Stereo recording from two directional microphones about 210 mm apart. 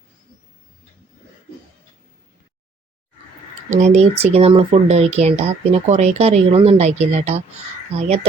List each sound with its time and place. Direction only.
3.7 s speech: 35° right (ahead or behind)